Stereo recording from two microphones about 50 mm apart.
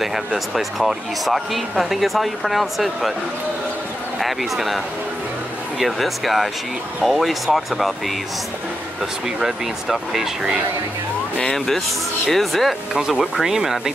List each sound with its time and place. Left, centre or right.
0.0 s speech: centre
4.2 s speech: centre
9.4 s speech: centre
11.5 s speech: centre